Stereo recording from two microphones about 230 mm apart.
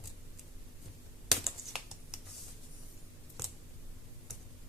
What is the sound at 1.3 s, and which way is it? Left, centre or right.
Computer keyboard, centre.